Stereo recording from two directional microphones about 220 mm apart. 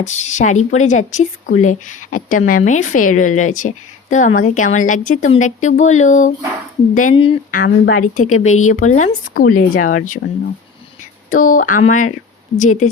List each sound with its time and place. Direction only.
0.0 s a woman's voice: 30° left (ahead or behind)
11.3 s a woman's voice: 35° left (ahead or behind)